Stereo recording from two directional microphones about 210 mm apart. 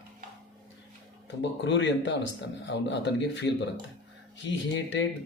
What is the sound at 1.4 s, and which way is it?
A man's voice, 60° left (ahead or behind).